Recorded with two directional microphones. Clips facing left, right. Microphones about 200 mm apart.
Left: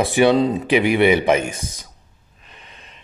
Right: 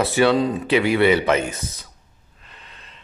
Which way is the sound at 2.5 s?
15° left (ahead or behind).